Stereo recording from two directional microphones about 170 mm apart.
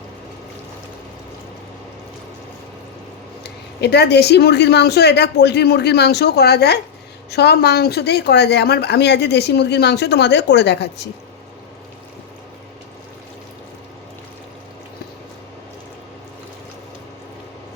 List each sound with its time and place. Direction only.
3.4 s speech: 75° left (ahead or behind)